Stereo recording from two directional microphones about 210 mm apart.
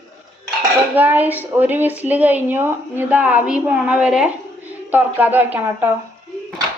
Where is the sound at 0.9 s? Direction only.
10° right (ahead or behind).